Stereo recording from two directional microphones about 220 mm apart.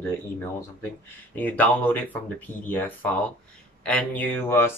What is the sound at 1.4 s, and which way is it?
Speech, 5° left (ahead or behind).